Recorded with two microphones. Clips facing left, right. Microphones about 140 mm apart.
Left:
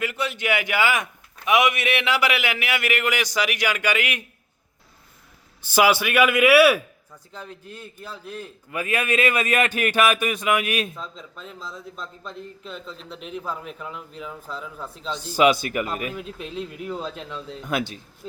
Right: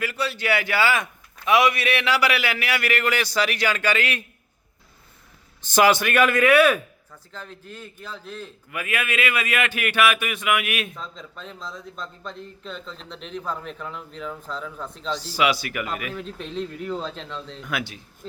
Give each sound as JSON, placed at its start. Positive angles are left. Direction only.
{"t": 0.0, "sound": "a man's voice", "side_deg": 20}
{"t": 5.6, "sound": "a man's voice", "side_deg": 10}
{"t": 8.7, "sound": "speech", "side_deg": 35}
{"t": 10.9, "sound": "a man's voice", "side_deg": 0}
{"t": 15.2, "sound": "speech", "side_deg": 50}
{"t": 15.7, "sound": "speech", "side_deg": 35}
{"t": 16.1, "sound": "a man's voice", "side_deg": 5}
{"t": 17.6, "sound": "speech", "side_deg": 35}